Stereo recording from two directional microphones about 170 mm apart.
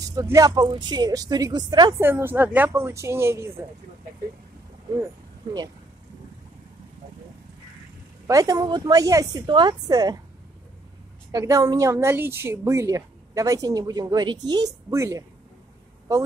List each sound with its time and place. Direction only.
0.0 s a woman's voice: 20° right (ahead or behind)
2.0 s speech: 15° right (ahead or behind)
8.3 s a woman's voice: 20° right (ahead or behind)
11.3 s a woman's voice: 20° right (ahead or behind)